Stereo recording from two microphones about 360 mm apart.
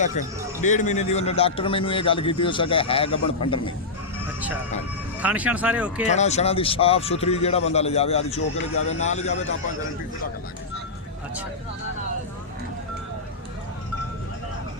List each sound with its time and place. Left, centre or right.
0.0 s a man's voice: centre
5.2 s speech: centre
6.1 s a man's voice: centre